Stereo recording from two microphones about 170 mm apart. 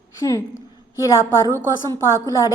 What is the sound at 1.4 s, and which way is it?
Speech, 20° right (ahead or behind).